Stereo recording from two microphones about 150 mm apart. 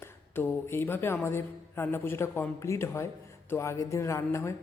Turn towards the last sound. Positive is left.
turn(degrees=20)  # may be behind; listen again after turning